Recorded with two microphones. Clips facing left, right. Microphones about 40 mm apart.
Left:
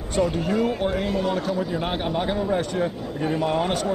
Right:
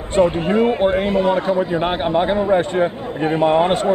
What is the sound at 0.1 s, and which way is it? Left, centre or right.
A man's voice, right.